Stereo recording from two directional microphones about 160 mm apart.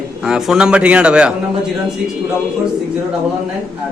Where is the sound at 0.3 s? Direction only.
5° right (ahead or behind).